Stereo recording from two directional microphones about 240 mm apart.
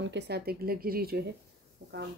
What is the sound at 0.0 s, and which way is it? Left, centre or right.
Speech, right.